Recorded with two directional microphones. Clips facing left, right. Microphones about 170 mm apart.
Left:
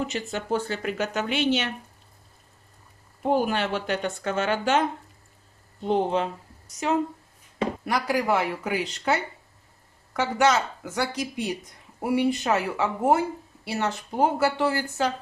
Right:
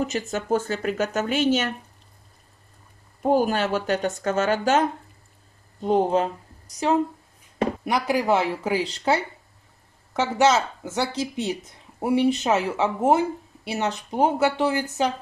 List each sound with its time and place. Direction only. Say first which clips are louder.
0.0 s speech: right 3 dB; 45° right (ahead or behind)
3.2 s speech: right 3 dB; 45° right (ahead or behind)
7.8 s speech: right 1 dB; 20° right (ahead or behind)